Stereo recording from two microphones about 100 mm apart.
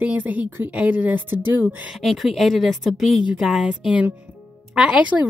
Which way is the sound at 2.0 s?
Centre (ahead or behind).